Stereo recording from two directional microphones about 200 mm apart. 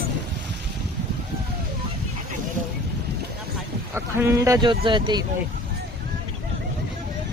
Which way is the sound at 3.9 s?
10° right (ahead or behind).